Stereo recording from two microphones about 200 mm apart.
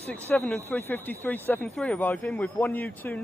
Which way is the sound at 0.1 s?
10° left (ahead or behind).